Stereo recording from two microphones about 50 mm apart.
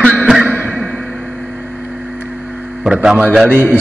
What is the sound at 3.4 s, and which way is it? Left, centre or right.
Speech, left.